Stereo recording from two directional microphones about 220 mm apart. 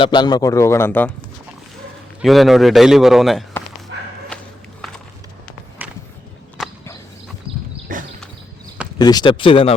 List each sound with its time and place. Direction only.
0.0 s a man's voice: 20° left (ahead or behind)
2.2 s a man's voice: centre (ahead or behind)
4.8 s walk: centre (ahead or behind)
5.8 s a sound: 10° right (ahead or behind)
7.9 s a sound: 40° right (ahead or behind)
9.0 s speech: 20° left (ahead or behind)